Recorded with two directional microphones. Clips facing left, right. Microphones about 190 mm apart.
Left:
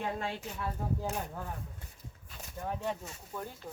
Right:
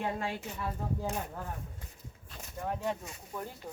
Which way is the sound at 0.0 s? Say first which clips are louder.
Right 1 dB; 10° right (ahead or behind).